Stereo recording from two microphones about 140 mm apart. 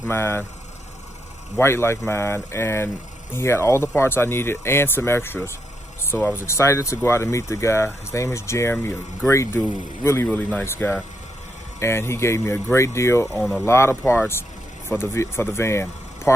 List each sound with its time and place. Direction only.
0.1 s speech: 15° left (ahead or behind)
1.5 s speech: 15° left (ahead or behind)
13.2 s speech: centre (ahead or behind)
13.7 s speech: 20° left (ahead or behind)